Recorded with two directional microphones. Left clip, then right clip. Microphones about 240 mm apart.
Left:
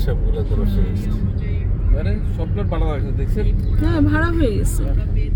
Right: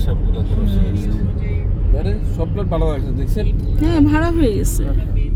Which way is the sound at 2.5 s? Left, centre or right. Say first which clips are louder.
Right 5 dB; right.